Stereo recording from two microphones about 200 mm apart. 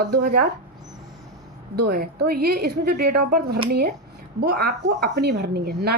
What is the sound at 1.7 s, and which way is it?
A woman's voice, 50° right (ahead or behind).